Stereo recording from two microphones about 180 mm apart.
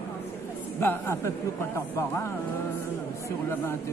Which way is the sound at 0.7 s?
15° left (ahead or behind).